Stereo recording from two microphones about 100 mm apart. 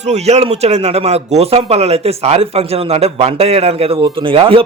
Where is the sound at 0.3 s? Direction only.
90° right.